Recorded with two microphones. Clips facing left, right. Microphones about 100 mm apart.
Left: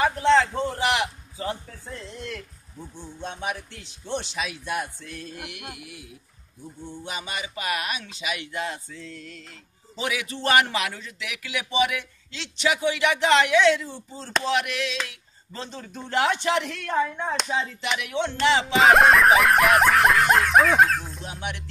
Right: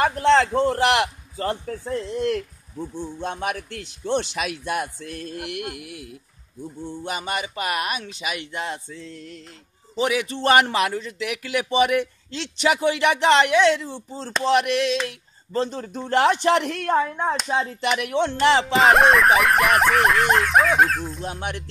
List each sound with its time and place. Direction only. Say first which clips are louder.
0.0 s a man's voice: right 2 dB; 55° right (ahead or behind)
7.1 s a man's voice: right 6 dB; 50° right (ahead or behind)
8.5 s a man's voice: right 1 dB; 30° right (ahead or behind)
14.5 s a man's voice: right 9 dB; 45° right (ahead or behind)
18.7 s snicker: left 2 dB; centre (ahead or behind)
21.3 s a man's voice: right 4 dB; 45° right (ahead or behind)